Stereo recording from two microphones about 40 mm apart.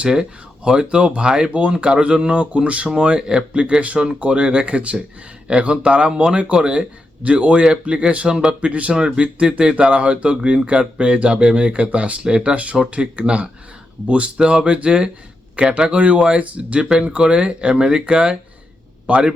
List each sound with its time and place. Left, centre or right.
0.1 s speech: centre